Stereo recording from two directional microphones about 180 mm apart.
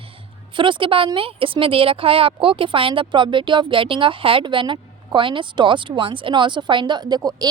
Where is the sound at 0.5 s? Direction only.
25° right (ahead or behind).